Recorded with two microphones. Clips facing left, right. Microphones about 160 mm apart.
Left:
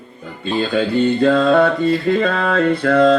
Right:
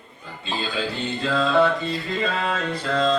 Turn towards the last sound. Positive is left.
turn(degrees=65)  # may be behind; listen again after turning